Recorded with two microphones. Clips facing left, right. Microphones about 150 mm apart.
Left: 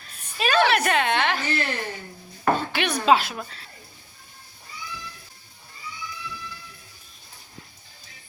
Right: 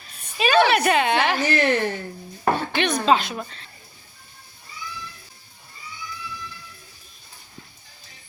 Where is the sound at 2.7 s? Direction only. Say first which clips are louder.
Right 1 dB; 10° left (ahead or behind).